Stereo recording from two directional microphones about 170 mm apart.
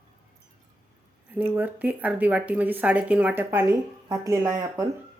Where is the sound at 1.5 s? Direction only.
10° right (ahead or behind).